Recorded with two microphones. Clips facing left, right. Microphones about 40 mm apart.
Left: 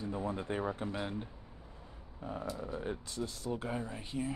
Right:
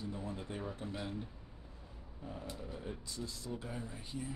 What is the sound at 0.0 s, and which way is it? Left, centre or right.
Speech, left.